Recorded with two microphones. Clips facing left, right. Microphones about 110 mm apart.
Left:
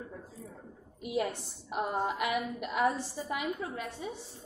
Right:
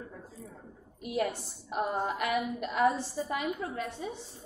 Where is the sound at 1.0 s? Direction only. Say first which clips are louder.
Right 1 dB; 20° left (ahead or behind).